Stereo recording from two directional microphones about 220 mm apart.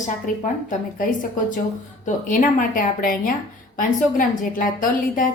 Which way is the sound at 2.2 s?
35° left (ahead or behind).